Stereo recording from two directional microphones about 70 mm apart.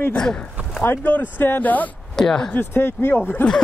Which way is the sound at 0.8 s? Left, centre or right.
Left.